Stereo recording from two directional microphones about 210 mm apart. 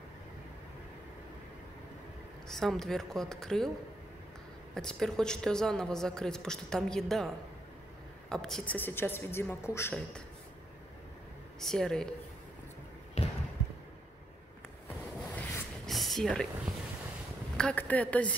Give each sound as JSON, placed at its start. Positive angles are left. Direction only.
{"t": 2.4, "sound": "a woman's voice", "side_deg": 0}
{"t": 4.7, "sound": "a woman's voice", "side_deg": 5}
{"t": 11.6, "sound": "a woman's voice", "side_deg": 0}
{"t": 13.2, "sound": "basketball bounce", "side_deg": 30}
{"t": 15.9, "sound": "speech", "side_deg": 0}